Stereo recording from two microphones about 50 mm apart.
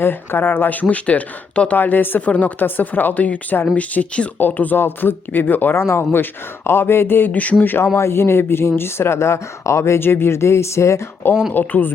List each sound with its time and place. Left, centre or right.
0.0 s speech: left
1.7 s speech: left
4.4 s speech: left
5.7 s speech: left
7.9 s speech: left
10.0 s speech: left
11.5 s speech: left